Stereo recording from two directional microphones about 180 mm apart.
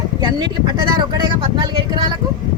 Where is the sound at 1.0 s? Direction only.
25° right (ahead or behind).